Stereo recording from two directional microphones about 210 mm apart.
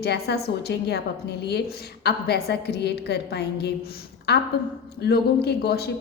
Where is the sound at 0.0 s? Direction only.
50° left (ahead or behind).